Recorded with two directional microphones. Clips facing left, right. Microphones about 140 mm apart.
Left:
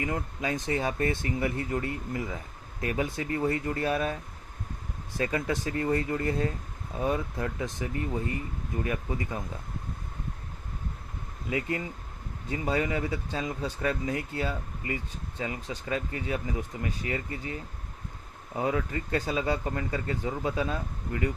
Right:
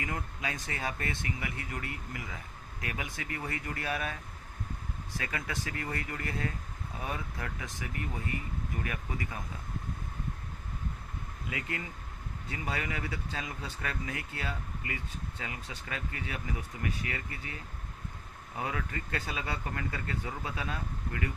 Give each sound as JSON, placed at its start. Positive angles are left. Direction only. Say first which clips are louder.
{"t": 0.0, "sound": "speech", "louder": "left 6 dB", "side_deg": 25}
{"t": 5.2, "sound": "speech", "louder": "left 10 dB", "side_deg": 25}
{"t": 11.4, "sound": "speech", "louder": "left 8 dB", "side_deg": 30}